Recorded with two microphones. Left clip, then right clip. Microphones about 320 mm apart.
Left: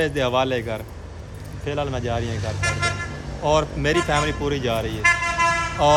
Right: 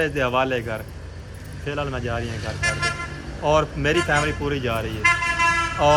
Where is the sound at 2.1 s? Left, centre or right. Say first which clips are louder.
Left 1 dB; left.